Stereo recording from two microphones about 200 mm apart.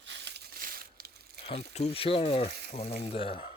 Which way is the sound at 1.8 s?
30° left (ahead or behind).